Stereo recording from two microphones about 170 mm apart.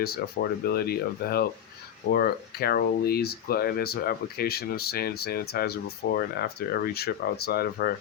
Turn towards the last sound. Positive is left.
turn(degrees=65)  # may be behind; listen again after turning